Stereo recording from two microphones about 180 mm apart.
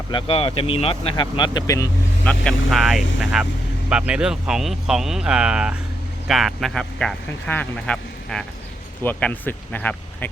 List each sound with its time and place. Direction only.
0.1 s speech: 30° left (ahead or behind)
2.2 s speech: 5° left (ahead or behind)